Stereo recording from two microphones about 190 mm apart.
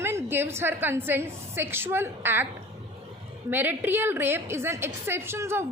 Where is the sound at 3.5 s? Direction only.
10° right (ahead or behind).